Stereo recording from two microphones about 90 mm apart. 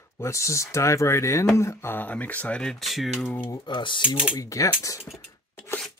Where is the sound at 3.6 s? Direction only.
60° left (ahead or behind).